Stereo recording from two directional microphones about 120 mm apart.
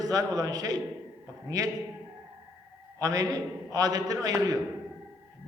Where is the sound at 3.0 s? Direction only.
30° right (ahead or behind).